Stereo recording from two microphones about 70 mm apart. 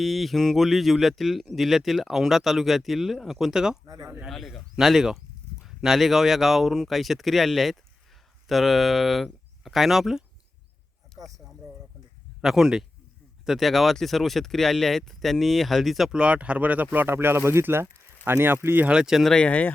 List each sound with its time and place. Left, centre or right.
0.0 s speech: centre
3.8 s speech: right
4.3 s speech: centre
12.4 s speech: centre
16.1 s speech: centre; by 18.9 s right
18.9 s speech: centre
19.2 s speech: centre
19.5 s speech: left